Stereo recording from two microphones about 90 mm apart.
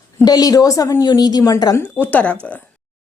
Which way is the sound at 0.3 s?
45° left (ahead or behind).